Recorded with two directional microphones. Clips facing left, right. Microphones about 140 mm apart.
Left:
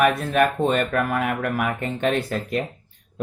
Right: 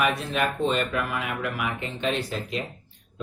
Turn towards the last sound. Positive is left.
turn(degrees=50)  # may be behind; listen again after turning